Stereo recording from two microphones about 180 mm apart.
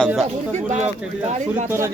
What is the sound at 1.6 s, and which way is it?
Speech, 15° right (ahead or behind).